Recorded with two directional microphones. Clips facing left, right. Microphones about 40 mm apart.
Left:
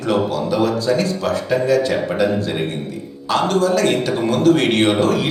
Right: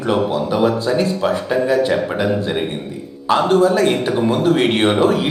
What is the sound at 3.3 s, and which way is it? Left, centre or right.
A man's voice, right.